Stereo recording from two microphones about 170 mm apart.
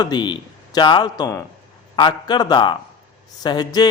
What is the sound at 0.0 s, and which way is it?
A man's voice, 25° left (ahead or behind).